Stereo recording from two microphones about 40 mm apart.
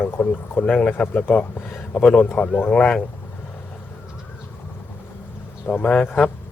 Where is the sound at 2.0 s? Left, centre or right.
Left.